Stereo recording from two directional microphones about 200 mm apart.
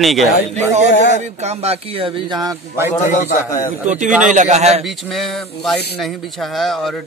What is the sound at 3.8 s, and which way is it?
Speech, 40° right (ahead or behind).